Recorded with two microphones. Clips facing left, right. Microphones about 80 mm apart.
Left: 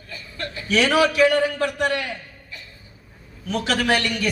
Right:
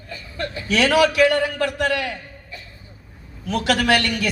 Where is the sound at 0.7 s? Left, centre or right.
Right.